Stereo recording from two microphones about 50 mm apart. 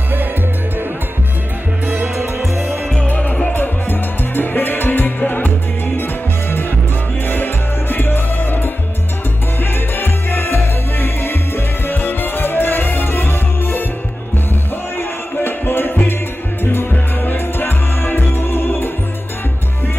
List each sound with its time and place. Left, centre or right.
2.5 s music: right
3.1 s music: left
3.5 s music: left
7.2 s music: left
15.0 s music: left